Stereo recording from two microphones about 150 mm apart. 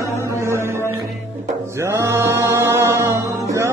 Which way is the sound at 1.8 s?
15° right (ahead or behind).